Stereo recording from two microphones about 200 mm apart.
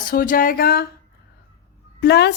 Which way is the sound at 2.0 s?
55° left (ahead or behind).